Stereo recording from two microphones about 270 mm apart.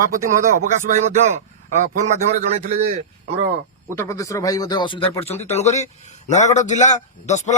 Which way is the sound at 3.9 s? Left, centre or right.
Centre.